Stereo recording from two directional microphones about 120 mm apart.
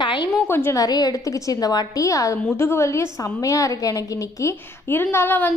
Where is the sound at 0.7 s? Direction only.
30° left (ahead or behind).